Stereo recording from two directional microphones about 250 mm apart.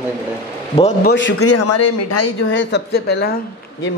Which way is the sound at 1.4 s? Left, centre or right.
Left.